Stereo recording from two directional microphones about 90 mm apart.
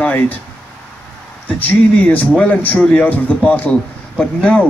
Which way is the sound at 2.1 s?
15° left (ahead or behind).